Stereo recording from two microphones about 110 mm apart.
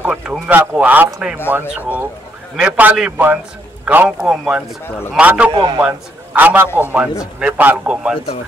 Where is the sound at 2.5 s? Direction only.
15° right (ahead or behind).